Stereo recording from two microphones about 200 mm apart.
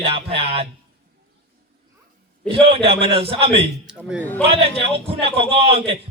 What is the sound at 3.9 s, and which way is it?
Speech, 5° right (ahead or behind).